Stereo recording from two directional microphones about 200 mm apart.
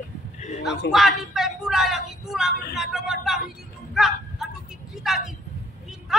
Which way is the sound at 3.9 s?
Centre (ahead or behind).